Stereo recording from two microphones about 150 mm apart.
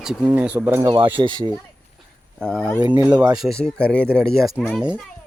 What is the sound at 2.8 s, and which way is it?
Speech, 25° right (ahead or behind).